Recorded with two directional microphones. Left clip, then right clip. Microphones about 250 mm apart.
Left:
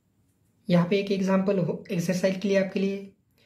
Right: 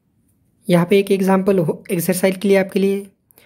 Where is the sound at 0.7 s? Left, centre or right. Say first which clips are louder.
Right 10 dB; right.